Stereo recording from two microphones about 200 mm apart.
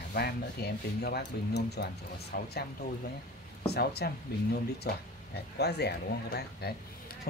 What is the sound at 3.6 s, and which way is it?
Speech, 55° left (ahead or behind).